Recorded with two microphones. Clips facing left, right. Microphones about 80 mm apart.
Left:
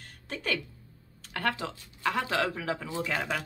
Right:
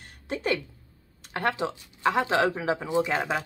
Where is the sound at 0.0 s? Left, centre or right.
Right.